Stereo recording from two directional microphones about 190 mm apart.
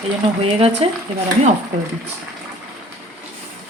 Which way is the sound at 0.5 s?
30° right (ahead or behind).